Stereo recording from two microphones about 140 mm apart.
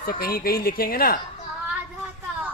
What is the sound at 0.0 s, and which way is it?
A woman's voice, 90° left.